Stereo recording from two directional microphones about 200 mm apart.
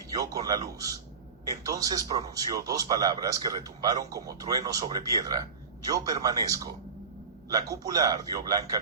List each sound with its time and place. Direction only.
0.1 s a man's voice: 20° right (ahead or behind)